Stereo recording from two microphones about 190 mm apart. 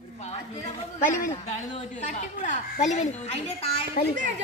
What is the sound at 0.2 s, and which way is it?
A woman's voice, 35° left (ahead or behind).